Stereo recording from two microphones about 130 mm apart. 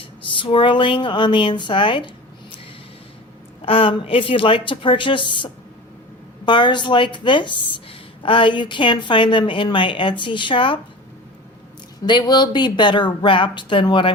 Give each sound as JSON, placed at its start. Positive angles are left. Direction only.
{"t": 0.0, "sound": "speech", "side_deg": 40}
{"t": 3.7, "sound": "a woman's voice", "side_deg": 45}
{"t": 12.0, "sound": "a woman's voice", "side_deg": 35}